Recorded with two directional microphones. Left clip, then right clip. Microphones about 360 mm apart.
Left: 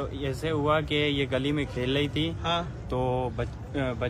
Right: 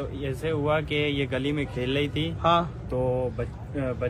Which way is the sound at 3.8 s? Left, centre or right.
Centre.